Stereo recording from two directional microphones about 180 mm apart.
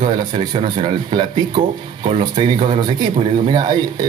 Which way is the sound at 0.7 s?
30° right (ahead or behind).